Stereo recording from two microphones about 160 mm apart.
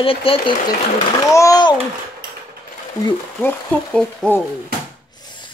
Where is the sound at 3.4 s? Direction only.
10° left (ahead or behind).